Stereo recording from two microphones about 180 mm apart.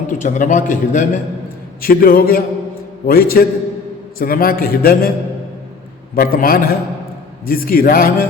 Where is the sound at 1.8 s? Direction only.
55° left (ahead or behind).